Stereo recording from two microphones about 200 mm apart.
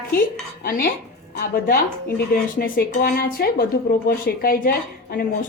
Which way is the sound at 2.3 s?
50° left (ahead or behind).